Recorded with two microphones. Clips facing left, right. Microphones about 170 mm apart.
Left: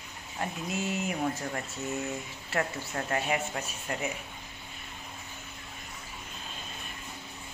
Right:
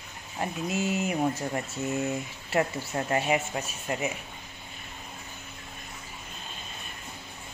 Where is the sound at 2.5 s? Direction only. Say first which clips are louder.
Right 4 dB; 20° right (ahead or behind).